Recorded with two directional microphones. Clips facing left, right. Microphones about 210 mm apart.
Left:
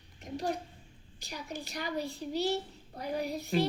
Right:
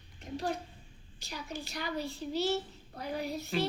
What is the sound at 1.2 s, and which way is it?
A child's voice, 15° left (ahead or behind).